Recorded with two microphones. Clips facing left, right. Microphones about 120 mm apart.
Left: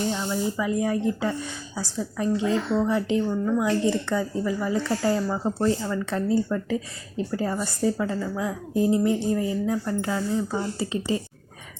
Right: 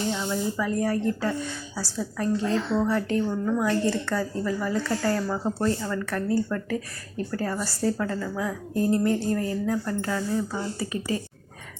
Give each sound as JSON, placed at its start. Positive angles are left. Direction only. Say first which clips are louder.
{"t": 0.1, "sound": "a woman's voice", "louder": "left 1 dB", "side_deg": 5}